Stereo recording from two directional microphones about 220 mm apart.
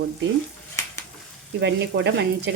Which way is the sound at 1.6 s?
50° right (ahead or behind).